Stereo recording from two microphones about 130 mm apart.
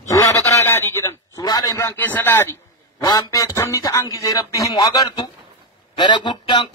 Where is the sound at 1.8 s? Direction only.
15° left (ahead or behind).